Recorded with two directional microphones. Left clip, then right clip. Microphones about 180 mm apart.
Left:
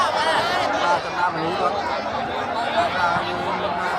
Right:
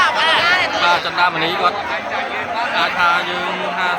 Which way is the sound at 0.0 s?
20° left (ahead or behind).